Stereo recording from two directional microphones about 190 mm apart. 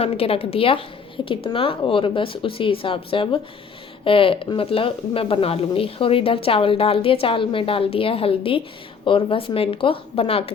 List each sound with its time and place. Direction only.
0.0 s speech: 30° left (ahead or behind)